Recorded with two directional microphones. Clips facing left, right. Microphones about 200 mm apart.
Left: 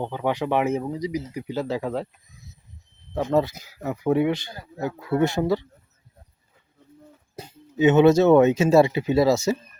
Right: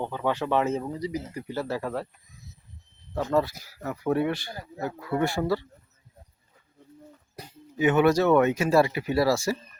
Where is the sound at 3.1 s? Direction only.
20° left (ahead or behind).